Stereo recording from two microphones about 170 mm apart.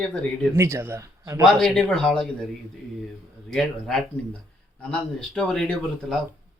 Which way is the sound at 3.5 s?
5° left (ahead or behind).